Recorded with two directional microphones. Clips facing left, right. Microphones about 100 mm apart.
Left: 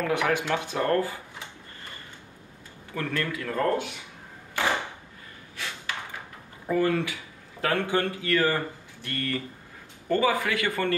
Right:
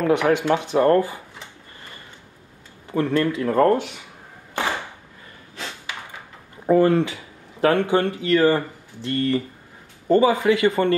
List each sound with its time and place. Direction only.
0.0 s speech: 20° right (ahead or behind)
2.9 s speech: 25° right (ahead or behind)
5.6 s ping: 25° right (ahead or behind)
6.6 s speech: 35° right (ahead or behind)